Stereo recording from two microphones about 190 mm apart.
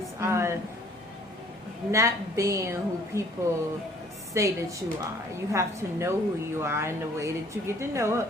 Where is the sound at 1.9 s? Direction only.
15° right (ahead or behind).